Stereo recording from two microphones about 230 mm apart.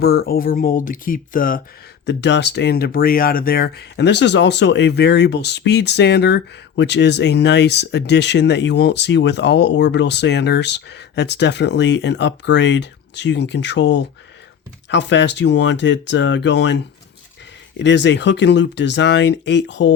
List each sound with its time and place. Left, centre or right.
0.0 s speech: left
2.0 s speech: left